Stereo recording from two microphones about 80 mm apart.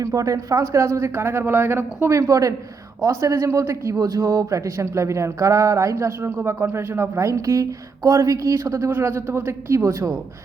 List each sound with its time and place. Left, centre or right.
0.0 s speech: right
2.1 s a woman's voice: right
3.9 s speech: right
8.9 s speech: right